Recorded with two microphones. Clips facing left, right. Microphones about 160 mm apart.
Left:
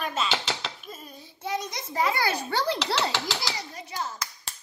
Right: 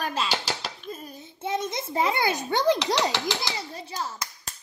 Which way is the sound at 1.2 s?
25° right (ahead or behind).